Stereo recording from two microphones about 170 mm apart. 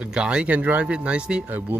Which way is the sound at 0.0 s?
5° right (ahead or behind).